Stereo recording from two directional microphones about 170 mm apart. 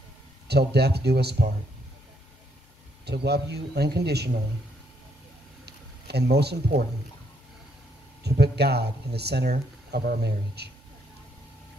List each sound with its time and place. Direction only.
0.7 s speech: 75° right (ahead or behind)
3.1 s speech: 75° right (ahead or behind)
6.0 s speech: 75° right (ahead or behind)
8.2 s speech: 80° right